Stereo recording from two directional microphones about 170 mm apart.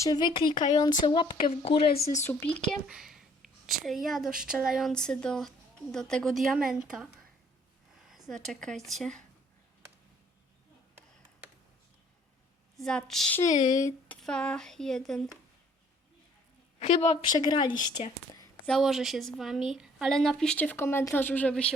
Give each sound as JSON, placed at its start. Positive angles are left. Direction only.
{"t": 0.0, "sound": "speech", "side_deg": 25}
{"t": 2.2, "sound": "speech", "side_deg": 10}
{"t": 2.6, "sound": "a woman's voice", "side_deg": 0}
{"t": 8.0, "sound": "a sound", "side_deg": 0}
{"t": 8.4, "sound": "a woman's voice", "side_deg": 0}
{"t": 12.7, "sound": "a woman's voice", "side_deg": 5}
{"t": 13.7, "sound": "speech", "side_deg": 15}
{"t": 14.2, "sound": "a woman's voice", "side_deg": 5}
{"t": 16.8, "sound": "a woman's voice", "side_deg": 35}
{"t": 17.3, "sound": "speech", "side_deg": 25}
{"t": 18.6, "sound": "a woman's voice", "side_deg": 0}